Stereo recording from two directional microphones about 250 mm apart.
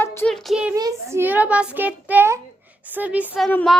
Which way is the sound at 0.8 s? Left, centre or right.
Centre.